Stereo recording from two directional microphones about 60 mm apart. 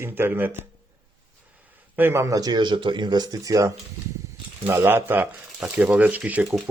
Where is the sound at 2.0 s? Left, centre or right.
Right.